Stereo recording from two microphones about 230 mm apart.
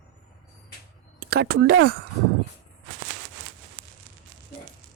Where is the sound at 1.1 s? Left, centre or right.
Right.